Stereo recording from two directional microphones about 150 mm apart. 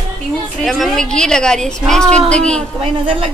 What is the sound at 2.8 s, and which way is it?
Speech, 35° right (ahead or behind).